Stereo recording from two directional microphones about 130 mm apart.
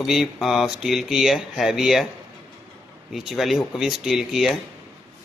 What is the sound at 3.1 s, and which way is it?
Speech, centre (ahead or behind).